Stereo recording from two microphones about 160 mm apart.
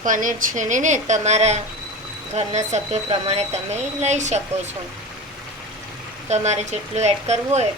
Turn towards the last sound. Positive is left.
turn(degrees=-45)  # may be behind; listen again after turning